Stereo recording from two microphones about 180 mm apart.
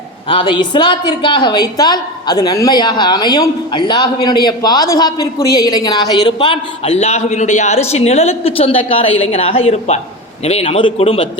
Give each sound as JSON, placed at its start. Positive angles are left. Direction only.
{"t": 0.3, "sound": "a woman's voice", "side_deg": 25}